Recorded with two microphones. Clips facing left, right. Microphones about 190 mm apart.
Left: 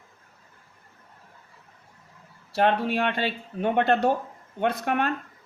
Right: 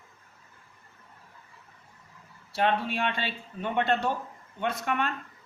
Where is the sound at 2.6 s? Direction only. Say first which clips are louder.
Left 4 dB; 45° left (ahead or behind).